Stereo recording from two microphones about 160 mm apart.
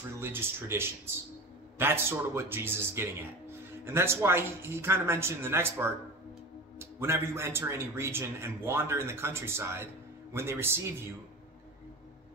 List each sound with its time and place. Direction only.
0.2 s speech: 15° right (ahead or behind)